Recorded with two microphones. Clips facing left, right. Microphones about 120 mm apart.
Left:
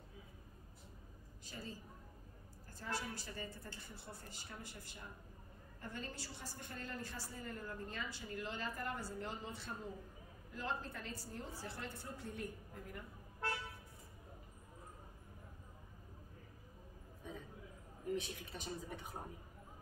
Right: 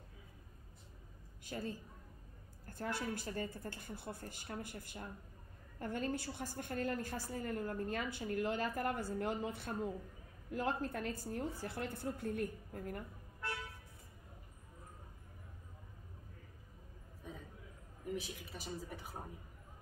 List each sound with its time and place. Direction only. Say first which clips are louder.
1.4 s a woman's voice: right 7 dB; 55° right (ahead or behind)
18.1 s speech: left 1 dB; 5° right (ahead or behind)